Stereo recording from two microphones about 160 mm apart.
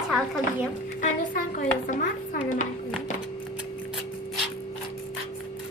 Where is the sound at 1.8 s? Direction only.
55° left (ahead or behind).